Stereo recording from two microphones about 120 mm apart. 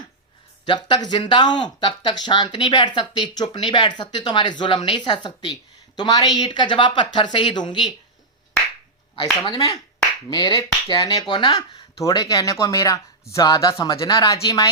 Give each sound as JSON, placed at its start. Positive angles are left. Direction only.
{"t": 0.6, "sound": "speech", "side_deg": 40}
{"t": 9.4, "sound": "speech", "side_deg": 30}